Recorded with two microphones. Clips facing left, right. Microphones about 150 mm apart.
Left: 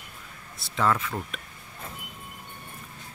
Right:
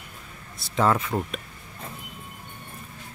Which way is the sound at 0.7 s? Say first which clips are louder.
Right 3 dB; 30° right (ahead or behind).